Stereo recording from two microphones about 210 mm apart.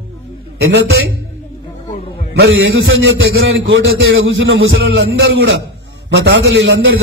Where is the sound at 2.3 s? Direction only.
70° right (ahead or behind).